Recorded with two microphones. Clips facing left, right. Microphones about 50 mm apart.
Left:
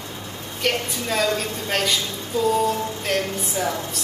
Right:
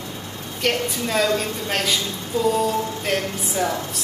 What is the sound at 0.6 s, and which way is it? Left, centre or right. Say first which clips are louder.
Speech: right 1 dB; centre.